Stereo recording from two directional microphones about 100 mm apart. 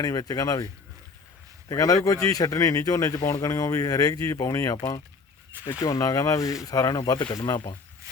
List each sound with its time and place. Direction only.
0.0 s speech: 40° left (ahead or behind)
1.7 s speech: 35° left (ahead or behind)
7.5 s speech: 55° left (ahead or behind)